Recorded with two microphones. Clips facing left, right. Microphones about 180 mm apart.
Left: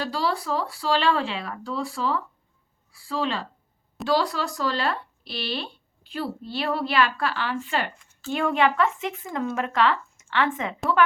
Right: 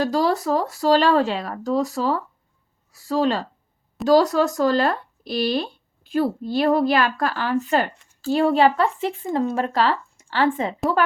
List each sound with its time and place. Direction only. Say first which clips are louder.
0.0 s a woman's voice: right 7 dB; 45° right (ahead or behind)